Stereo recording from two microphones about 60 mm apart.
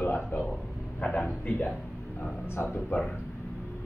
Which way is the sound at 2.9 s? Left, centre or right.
Centre.